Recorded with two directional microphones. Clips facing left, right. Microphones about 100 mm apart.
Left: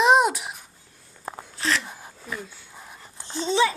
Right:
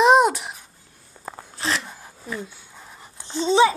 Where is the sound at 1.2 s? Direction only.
20° right (ahead or behind).